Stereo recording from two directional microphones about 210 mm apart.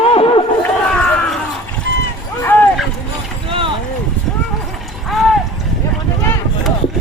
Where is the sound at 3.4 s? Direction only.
25° right (ahead or behind).